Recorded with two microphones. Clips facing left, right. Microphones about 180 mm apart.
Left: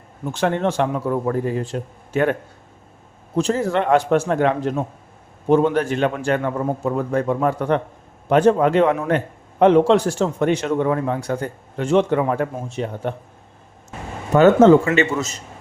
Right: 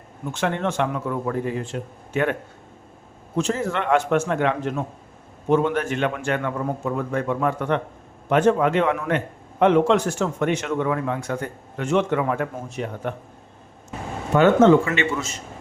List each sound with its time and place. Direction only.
0.3 s a man's voice: 35° left (ahead or behind)
3.3 s a man's voice: 35° left (ahead or behind)
14.3 s a man's voice: 40° left (ahead or behind)